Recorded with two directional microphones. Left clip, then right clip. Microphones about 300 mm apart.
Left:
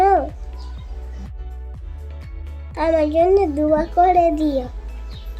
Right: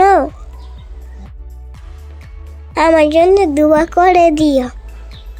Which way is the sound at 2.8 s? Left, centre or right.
Right.